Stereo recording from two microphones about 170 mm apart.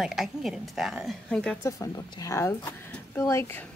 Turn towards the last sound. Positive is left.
turn(degrees=15)  # may be behind; listen again after turning